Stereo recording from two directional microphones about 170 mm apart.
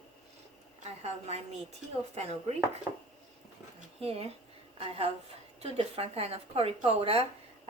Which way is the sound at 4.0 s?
35° right (ahead or behind).